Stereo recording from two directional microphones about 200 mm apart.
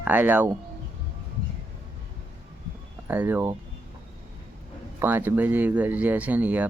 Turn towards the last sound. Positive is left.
turn(degrees=-10)  # may be behind; listen again after turning